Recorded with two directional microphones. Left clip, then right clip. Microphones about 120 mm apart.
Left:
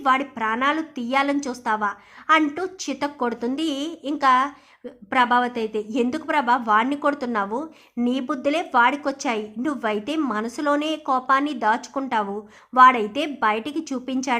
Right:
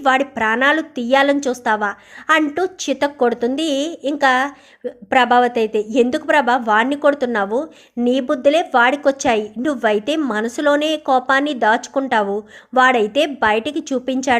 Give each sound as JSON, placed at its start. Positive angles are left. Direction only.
{"t": 0.0, "sound": "a woman's voice", "side_deg": -35}